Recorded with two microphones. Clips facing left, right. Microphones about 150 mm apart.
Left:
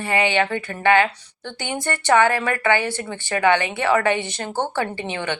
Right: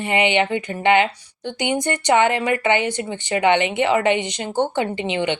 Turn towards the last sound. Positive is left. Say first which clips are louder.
# right 4 dB
turn(degrees=-20)  # may be behind; listen again after turning